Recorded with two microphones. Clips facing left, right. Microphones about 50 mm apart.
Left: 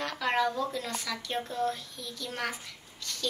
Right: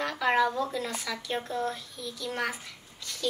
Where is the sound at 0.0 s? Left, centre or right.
Centre.